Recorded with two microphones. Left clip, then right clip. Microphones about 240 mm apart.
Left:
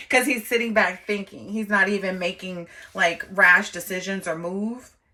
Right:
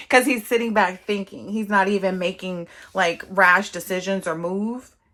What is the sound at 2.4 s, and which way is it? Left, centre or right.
Speech, right.